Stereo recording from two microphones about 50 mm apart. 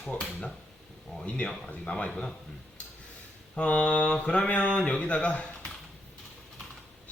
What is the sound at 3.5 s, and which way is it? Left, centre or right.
Speech, left.